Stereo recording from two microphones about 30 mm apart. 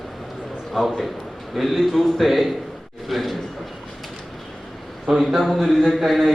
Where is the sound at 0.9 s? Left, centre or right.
Centre.